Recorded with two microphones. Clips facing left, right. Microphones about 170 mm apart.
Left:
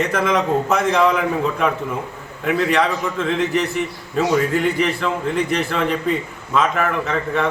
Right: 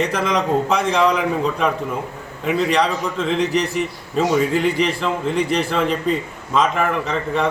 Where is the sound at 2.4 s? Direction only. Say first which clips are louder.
Even; 5° left (ahead or behind).